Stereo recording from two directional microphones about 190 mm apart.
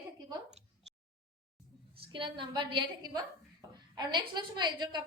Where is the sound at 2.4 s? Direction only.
25° right (ahead or behind).